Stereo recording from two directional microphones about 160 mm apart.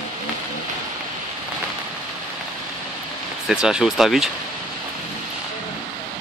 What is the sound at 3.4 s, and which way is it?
Speech, 5° right (ahead or behind).